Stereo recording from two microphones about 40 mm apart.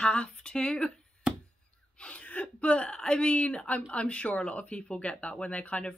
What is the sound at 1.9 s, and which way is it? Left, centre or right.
Gasp, left.